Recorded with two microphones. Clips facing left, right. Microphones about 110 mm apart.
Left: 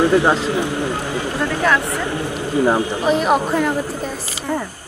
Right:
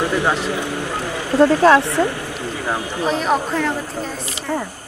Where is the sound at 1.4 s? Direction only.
30° right (ahead or behind).